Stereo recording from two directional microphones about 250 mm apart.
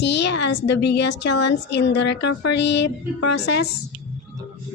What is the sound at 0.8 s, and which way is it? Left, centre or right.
A woman's voice, left.